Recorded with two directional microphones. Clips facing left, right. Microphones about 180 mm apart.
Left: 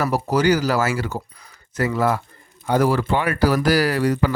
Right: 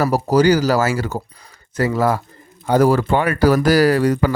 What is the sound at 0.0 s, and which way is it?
Speech, 40° right (ahead or behind).